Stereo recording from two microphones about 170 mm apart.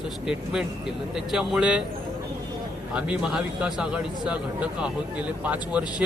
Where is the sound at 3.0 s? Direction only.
5° right (ahead or behind).